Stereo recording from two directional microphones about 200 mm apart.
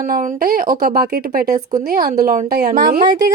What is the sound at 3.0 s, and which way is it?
Speech, 20° right (ahead or behind).